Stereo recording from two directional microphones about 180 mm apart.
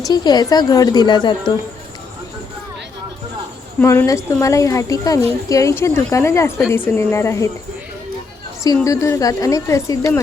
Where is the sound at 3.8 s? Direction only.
15° left (ahead or behind).